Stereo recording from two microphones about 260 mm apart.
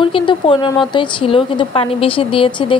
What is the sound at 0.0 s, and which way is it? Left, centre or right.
Speech, centre.